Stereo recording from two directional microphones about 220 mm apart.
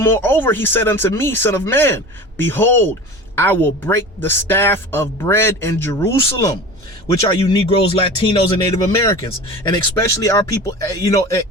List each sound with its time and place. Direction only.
0.0 s a woman's voice: 10° left (ahead or behind)
9.6 s a woman's voice: 15° left (ahead or behind)